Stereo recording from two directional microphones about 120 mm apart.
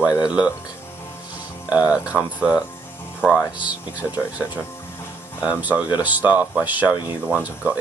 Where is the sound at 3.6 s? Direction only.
10° right (ahead or behind).